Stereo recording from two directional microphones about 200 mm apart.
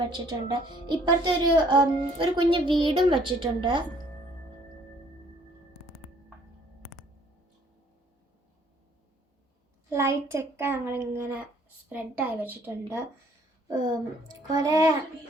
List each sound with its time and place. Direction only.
0.0 s speech: 20° right (ahead or behind)
9.9 s a child's voice: 15° right (ahead or behind)
13.7 s a child's voice: 20° right (ahead or behind)